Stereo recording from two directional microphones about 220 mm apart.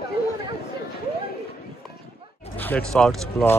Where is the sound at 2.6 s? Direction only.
5° left (ahead or behind).